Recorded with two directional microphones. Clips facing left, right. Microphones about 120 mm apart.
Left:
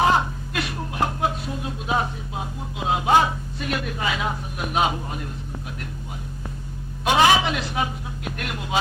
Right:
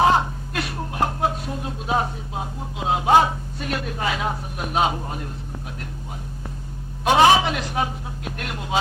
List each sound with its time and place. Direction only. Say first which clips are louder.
0.0 s a sound: right 2 dB; 30° right (ahead or behind)
0.5 s speech: even; 35° right (ahead or behind)
7.0 s a man's voice: right 3 dB; 35° right (ahead or behind)